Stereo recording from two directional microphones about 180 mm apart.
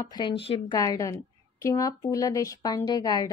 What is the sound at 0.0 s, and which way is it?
A woman's voice, 25° left (ahead or behind).